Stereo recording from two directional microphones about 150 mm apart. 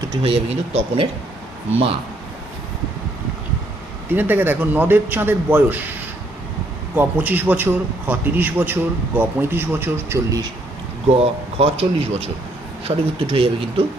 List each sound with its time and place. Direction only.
0.2 s speech: 40° right (ahead or behind)
4.1 s a man's voice: 10° right (ahead or behind)
6.9 s a man's voice: 10° right (ahead or behind)
11.2 s speech: 40° right (ahead or behind)